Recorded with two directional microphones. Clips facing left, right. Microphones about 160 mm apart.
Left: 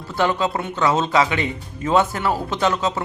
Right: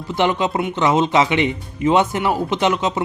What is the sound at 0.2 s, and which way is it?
Speech, 20° right (ahead or behind).